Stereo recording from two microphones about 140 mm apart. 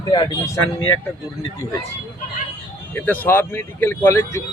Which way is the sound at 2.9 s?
15° left (ahead or behind).